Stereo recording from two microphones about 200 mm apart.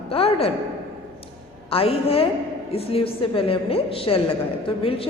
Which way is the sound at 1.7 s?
30° left (ahead or behind).